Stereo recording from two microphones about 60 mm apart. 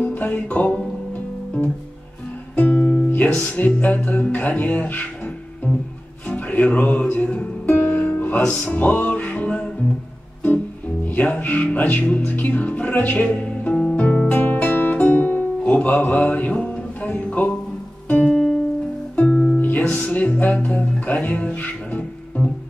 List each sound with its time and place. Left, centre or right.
0.0 s music: left
2.5 s music: left
5.7 s music: centre
6.2 s music: left
8.4 s music: centre
11.3 s music: left
14.3 s guitar: left
18.0 s music: left